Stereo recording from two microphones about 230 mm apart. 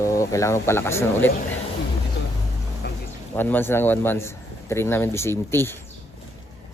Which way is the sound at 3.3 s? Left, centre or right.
Centre.